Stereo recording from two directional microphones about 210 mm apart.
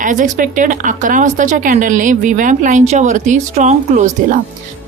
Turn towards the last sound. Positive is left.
turn(degrees=-35)  # may be behind; listen again after turning